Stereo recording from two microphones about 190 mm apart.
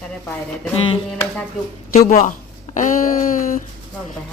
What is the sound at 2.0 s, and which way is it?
Speech, 45° left (ahead or behind).